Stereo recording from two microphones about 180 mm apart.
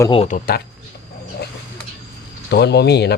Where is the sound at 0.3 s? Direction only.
50° left (ahead or behind).